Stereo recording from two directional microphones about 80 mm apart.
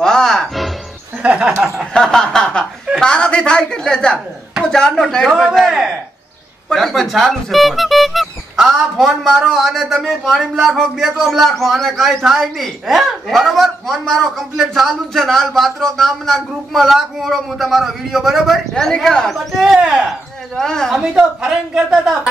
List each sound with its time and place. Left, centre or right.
0.0 s music: centre
1.2 s a woman's voice: centre
2.0 s a woman's voice: centre
20.9 s a woman's voice: centre